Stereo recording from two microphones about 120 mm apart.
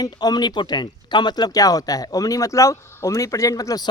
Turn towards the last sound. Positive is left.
turn(degrees=30)  # may be behind; listen again after turning